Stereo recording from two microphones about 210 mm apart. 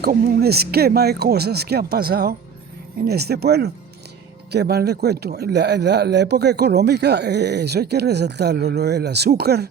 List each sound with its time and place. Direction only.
0.0 s speech: 45° right (ahead or behind)